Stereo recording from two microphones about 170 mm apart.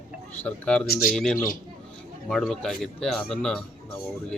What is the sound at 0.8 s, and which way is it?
Speech, 60° left (ahead or behind).